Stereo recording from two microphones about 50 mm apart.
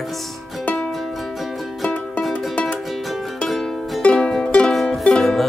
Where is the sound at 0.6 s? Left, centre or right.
Left.